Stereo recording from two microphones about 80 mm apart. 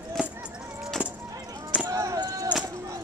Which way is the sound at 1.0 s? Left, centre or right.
Centre.